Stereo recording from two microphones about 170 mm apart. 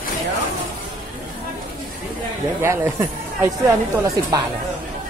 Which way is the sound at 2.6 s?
15° right (ahead or behind).